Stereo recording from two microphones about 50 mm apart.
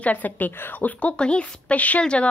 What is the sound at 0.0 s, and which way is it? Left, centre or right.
Speech, left.